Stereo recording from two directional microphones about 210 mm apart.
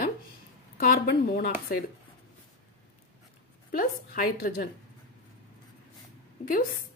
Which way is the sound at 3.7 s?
45° left (ahead or behind).